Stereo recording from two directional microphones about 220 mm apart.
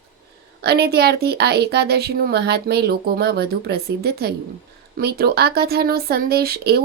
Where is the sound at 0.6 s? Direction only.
45° right (ahead or behind).